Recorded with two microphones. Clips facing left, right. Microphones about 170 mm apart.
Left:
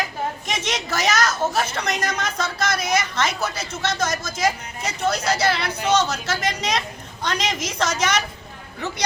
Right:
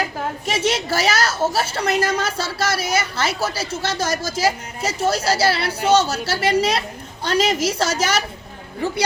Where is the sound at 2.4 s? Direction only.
10° right (ahead or behind).